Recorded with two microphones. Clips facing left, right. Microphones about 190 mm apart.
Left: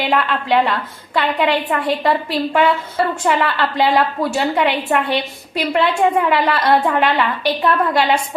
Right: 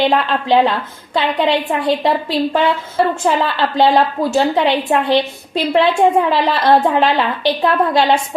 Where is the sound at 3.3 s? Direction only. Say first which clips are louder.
Right 1 dB; 30° right (ahead or behind).